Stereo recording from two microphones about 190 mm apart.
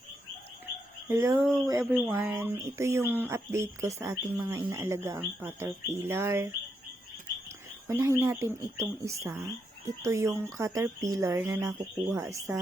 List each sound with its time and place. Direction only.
1.0 s speech: 15° right (ahead or behind)
1.8 s speech: 5° right (ahead or behind)
7.9 s speech: 15° right (ahead or behind)